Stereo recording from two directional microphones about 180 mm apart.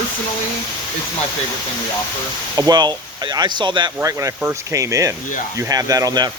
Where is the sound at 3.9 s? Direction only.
15° right (ahead or behind).